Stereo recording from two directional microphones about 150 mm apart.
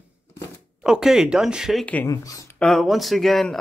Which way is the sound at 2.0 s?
20° left (ahead or behind).